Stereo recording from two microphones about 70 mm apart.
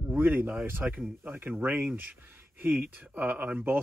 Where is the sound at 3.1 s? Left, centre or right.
Right.